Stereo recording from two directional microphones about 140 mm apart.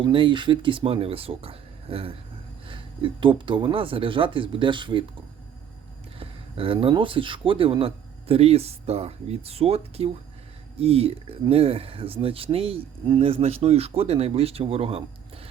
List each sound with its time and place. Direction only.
0.0 s speech: 35° right (ahead or behind)
6.1 s speech: 40° right (ahead or behind)